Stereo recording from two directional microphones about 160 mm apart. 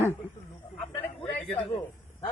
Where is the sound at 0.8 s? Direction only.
5° left (ahead or behind).